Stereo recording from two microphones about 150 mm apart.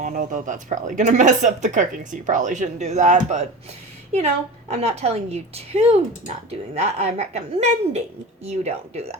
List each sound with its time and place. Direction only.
0.0 s speech: 60° right (ahead or behind)
4.7 s speech: 45° right (ahead or behind)